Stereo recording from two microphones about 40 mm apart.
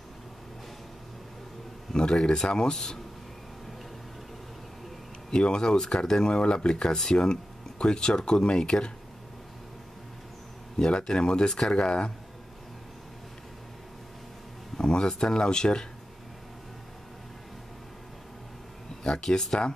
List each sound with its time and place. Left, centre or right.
1.9 s speech: centre
5.3 s speech: centre
10.8 s speech: centre
14.8 s speech: centre
19.0 s speech: centre